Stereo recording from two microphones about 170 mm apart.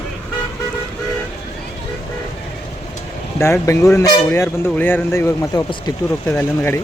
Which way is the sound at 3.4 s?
15° left (ahead or behind).